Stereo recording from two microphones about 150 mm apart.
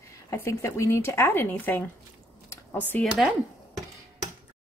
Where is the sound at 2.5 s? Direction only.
15° left (ahead or behind).